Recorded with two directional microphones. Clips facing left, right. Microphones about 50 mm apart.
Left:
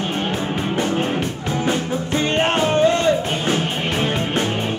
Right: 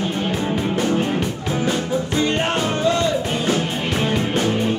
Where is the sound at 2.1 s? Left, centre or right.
Left.